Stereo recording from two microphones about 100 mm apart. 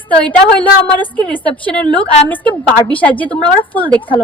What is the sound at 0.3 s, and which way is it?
A woman's voice, 15° left (ahead or behind).